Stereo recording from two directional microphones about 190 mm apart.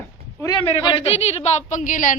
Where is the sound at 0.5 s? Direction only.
25° left (ahead or behind); by 2.1 s 45° left (ahead or behind).